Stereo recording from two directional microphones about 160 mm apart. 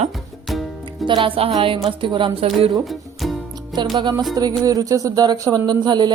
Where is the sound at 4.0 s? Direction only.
25° right (ahead or behind).